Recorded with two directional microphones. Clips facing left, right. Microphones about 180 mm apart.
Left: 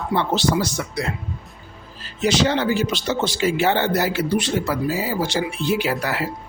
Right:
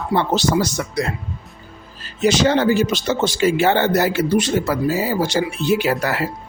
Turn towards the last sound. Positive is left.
turn(degrees=-45)  # may be behind; listen again after turning